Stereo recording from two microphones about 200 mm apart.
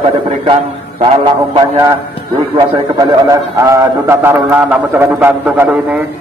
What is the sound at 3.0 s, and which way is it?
A man's voice, 15° right (ahead or behind).